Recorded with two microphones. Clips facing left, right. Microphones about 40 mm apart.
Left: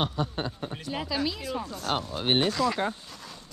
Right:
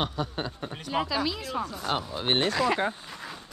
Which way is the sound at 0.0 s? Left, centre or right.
Centre.